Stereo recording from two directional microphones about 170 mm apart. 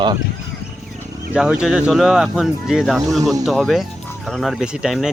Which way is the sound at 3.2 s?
20° right (ahead or behind).